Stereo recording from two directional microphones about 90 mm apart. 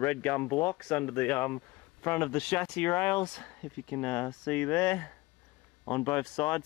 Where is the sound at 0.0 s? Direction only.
15° left (ahead or behind).